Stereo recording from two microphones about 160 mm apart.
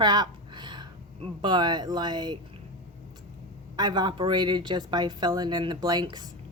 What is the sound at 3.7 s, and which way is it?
Speech, 25° right (ahead or behind).